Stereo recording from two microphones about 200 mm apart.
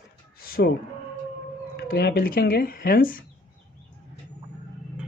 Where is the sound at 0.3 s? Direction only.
50° left (ahead or behind).